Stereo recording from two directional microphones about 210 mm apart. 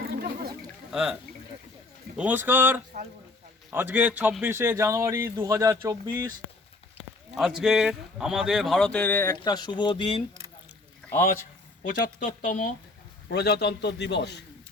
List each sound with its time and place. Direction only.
0.0 s chatter: 45° right (ahead or behind)
2.1 s a man's voice: 10° right (ahead or behind)
7.3 s speech: centre (ahead or behind); by 10.2 s 25° left (ahead or behind)
11.0 s a sound: 5° left (ahead or behind)
11.8 s speech: 35° left (ahead or behind)
13.3 s a man's voice: 50° left (ahead or behind)